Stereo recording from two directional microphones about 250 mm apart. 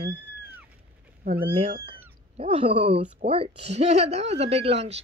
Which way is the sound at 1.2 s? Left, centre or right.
Right.